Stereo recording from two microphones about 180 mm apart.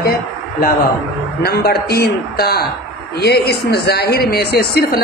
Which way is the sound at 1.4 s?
60° left (ahead or behind).